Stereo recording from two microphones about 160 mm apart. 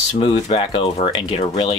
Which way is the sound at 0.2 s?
35° left (ahead or behind).